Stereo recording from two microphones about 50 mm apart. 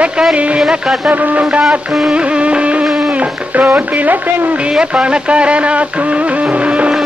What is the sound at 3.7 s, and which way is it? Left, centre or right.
Speech, right.